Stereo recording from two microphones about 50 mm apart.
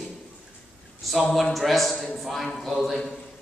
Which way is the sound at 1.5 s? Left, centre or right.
Centre.